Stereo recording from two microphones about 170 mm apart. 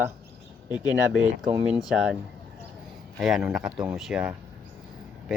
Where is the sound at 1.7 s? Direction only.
5° right (ahead or behind).